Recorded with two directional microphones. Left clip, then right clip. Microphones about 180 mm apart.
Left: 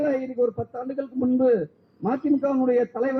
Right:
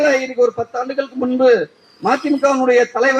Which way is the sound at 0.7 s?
10° right (ahead or behind).